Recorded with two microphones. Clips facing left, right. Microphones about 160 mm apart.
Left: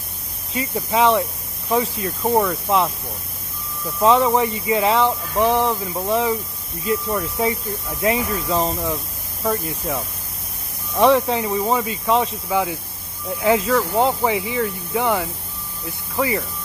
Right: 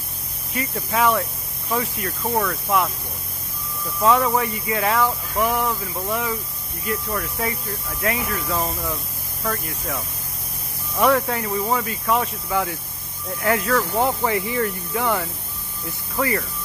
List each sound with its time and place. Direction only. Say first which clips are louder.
0.9 s speech: left 3 dB; 25° left (ahead or behind)
4.0 s speech: left 3 dB; 25° left (ahead or behind); by 14.7 s 5° left (ahead or behind)
15.0 s speech: left 3 dB; 20° left (ahead or behind)